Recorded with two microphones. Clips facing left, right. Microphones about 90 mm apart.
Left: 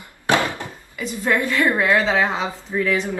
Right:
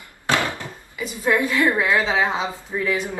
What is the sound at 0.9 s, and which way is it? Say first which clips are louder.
A woman's voice: even; 10° right (ahead or behind).